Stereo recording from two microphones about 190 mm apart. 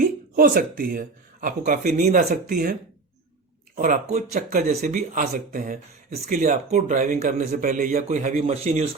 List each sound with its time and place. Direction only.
0.0 s speech: 50° right (ahead or behind)
3.8 s speech: 45° right (ahead or behind)